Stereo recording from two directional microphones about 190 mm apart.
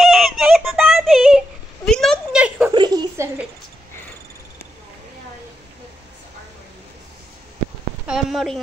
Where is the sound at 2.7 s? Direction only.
20° right (ahead or behind).